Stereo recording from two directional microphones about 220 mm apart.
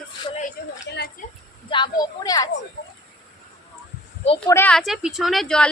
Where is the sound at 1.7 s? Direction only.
20° left (ahead or behind).